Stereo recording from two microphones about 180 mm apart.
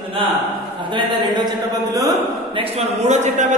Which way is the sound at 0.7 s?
25° right (ahead or behind).